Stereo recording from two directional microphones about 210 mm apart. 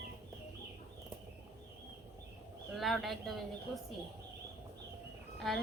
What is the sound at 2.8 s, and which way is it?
Speech, centre (ahead or behind).